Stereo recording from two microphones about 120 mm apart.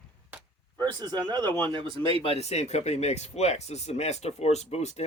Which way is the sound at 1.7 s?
45° right (ahead or behind).